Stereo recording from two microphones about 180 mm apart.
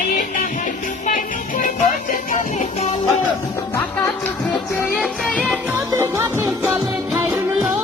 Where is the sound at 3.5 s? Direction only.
15° left (ahead or behind).